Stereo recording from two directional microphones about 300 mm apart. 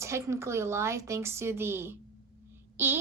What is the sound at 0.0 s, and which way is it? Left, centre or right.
A woman's voice, centre.